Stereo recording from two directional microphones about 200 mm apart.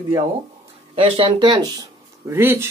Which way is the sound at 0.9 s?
30° right (ahead or behind).